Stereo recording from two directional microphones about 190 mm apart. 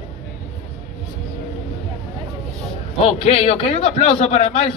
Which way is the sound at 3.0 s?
30° left (ahead or behind).